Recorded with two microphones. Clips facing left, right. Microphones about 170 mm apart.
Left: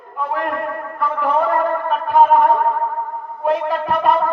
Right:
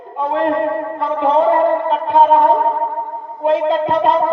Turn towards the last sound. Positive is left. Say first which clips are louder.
# right 3 dB
turn(degrees=-25)  # may be behind; listen again after turning